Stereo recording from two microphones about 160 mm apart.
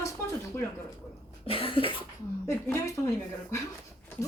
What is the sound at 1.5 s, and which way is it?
Cough, 35° left (ahead or behind).